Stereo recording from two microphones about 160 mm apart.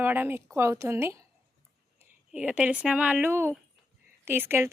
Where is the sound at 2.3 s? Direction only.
10° right (ahead or behind).